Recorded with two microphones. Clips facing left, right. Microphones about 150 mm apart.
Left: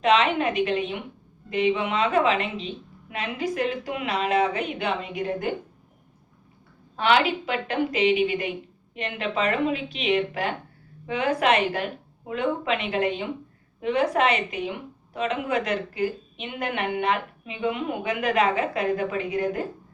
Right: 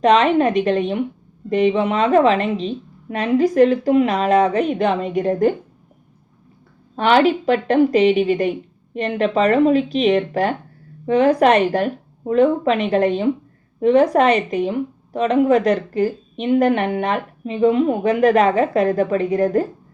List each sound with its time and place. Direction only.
0.0 s speech: 40° right (ahead or behind)
6.9 s speech: 40° right (ahead or behind)